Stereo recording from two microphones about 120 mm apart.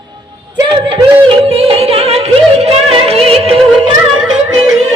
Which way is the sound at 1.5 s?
55° right (ahead or behind).